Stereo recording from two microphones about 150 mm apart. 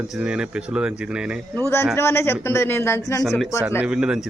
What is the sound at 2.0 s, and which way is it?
A man's voice, 15° left (ahead or behind).